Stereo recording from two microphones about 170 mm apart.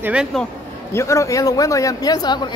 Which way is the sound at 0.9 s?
15° left (ahead or behind).